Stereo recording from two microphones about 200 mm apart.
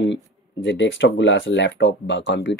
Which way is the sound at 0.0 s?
65° left (ahead or behind).